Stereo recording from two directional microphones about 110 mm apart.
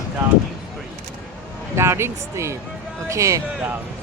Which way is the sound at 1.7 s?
25° right (ahead or behind).